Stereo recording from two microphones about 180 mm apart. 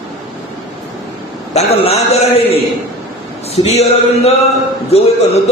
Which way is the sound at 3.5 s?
35° left (ahead or behind).